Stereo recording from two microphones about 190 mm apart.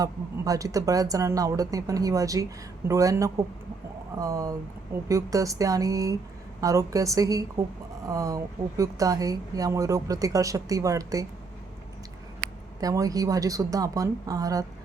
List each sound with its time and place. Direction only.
0.0 s speech: 20° right (ahead or behind)
12.8 s speech: 20° right (ahead or behind)